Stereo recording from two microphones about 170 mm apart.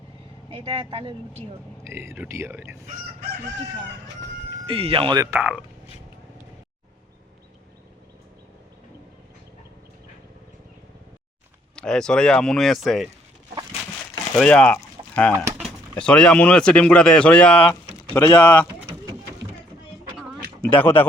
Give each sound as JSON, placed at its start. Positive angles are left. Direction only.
{"t": 0.5, "sound": "speech", "side_deg": -30}
{"t": 1.8, "sound": "speech", "side_deg": -15}
{"t": 4.6, "sound": "speech", "side_deg": -30}
{"t": 11.8, "sound": "speech", "side_deg": 5}
{"t": 14.3, "sound": "speech", "side_deg": 5}
{"t": 20.8, "sound": "speech", "side_deg": 10}